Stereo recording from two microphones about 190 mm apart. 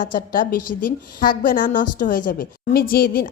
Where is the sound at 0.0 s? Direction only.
45° left (ahead or behind).